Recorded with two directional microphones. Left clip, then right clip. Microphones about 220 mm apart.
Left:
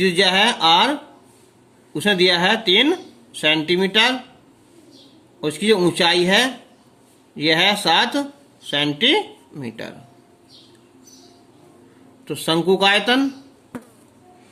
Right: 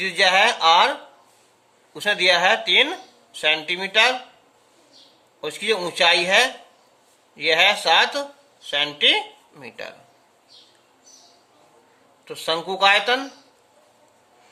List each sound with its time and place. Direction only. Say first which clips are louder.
0.0 s speech: left 1 dB; 15° left (ahead or behind)
5.4 s speech: left 6 dB; 15° left (ahead or behind)
12.2 s speech: left 5 dB; 15° left (ahead or behind)